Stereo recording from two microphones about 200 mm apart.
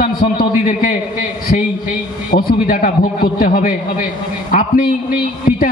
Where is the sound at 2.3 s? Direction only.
45° left (ahead or behind).